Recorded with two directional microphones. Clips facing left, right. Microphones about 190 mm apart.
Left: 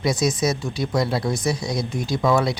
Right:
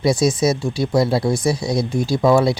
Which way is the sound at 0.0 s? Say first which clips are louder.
Right 5 dB; 30° right (ahead or behind).